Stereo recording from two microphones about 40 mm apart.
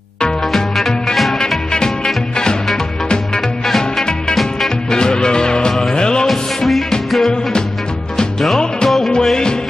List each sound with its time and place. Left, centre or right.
0.5 s music: centre
3.3 s music: centre
4.9 s music: centre
8.5 s music: centre